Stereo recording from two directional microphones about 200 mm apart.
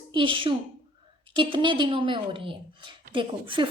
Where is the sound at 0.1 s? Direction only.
25° right (ahead or behind).